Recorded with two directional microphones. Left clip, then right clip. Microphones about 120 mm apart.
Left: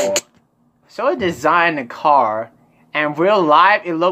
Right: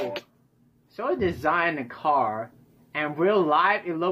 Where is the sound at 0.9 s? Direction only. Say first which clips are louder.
Left 8 dB; 30° left (ahead or behind).